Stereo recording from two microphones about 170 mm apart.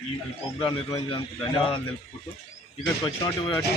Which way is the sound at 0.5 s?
30° left (ahead or behind).